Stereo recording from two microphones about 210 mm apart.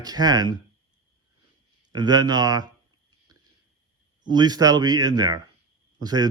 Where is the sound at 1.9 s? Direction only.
20° right (ahead or behind).